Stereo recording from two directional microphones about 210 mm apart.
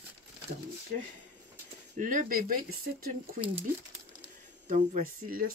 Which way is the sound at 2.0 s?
40° right (ahead or behind).